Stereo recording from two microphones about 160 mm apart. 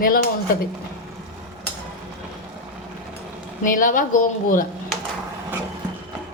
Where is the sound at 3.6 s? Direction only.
60° left (ahead or behind).